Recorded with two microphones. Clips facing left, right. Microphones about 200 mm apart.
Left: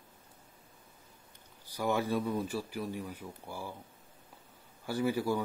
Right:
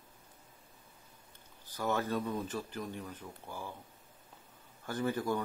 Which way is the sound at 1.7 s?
10° left (ahead or behind).